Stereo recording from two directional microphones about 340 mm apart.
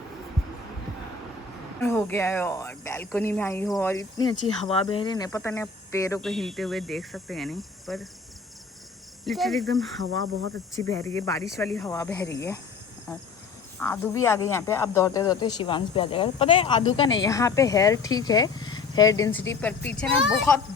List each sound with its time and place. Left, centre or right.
1.8 s speech: centre
9.2 s speech: centre
10.0 s speech: right
10.8 s speech: centre
13.7 s speech: centre